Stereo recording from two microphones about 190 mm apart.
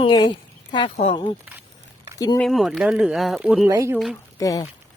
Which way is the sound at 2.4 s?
Centre (ahead or behind).